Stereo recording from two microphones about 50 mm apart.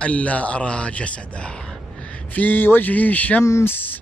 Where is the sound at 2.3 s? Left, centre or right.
Left.